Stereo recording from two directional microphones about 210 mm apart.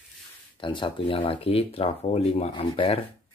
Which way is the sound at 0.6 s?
25° left (ahead or behind).